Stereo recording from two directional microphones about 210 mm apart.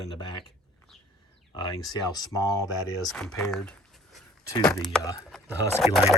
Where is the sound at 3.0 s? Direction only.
Centre (ahead or behind).